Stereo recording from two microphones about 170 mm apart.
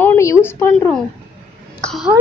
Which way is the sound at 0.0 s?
15° left (ahead or behind).